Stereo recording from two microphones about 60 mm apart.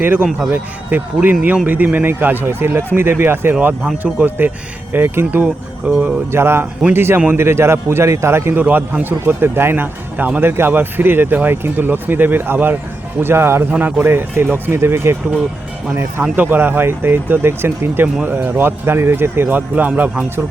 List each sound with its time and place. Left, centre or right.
0.3 s speech: centre
0.5 s speech: right
6.3 s a man's voice: right
13.7 s speech: right
14.0 s speech: right
16.3 s speech: right